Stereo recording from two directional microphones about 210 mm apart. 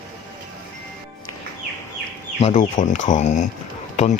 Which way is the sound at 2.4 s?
30° left (ahead or behind).